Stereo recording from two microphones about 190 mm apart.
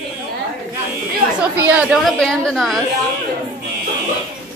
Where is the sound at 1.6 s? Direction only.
5° right (ahead or behind).